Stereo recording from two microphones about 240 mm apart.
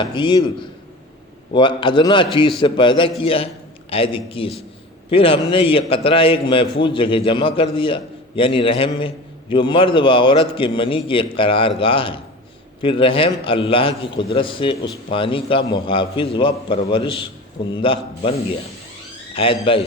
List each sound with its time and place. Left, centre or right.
0.0 s a man's voice: centre
1.5 s a man's voice: centre